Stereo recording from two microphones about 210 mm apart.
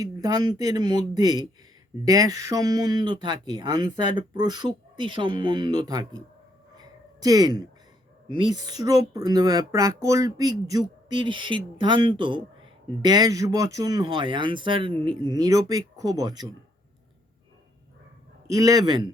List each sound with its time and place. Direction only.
0.0 s speech: 20° right (ahead or behind)
6.7 s a sound: 20° right (ahead or behind)
8.5 s speech: 20° right (ahead or behind)
18.4 s a man's voice: 15° right (ahead or behind)